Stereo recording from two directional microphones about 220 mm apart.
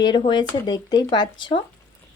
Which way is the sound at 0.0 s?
20° left (ahead or behind).